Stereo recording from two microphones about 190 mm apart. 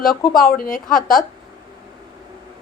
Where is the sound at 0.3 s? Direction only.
50° left (ahead or behind).